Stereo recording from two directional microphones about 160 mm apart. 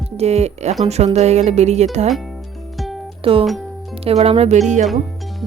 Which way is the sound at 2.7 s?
Centre (ahead or behind).